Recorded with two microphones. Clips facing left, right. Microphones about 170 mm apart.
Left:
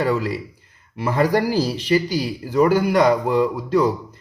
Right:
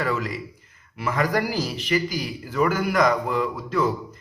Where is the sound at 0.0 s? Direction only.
30° left (ahead or behind).